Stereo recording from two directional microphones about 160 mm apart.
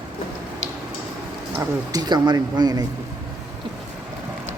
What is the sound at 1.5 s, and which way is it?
Speech, 25° right (ahead or behind).